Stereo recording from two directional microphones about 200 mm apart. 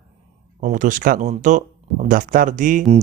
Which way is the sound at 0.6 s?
40° right (ahead or behind).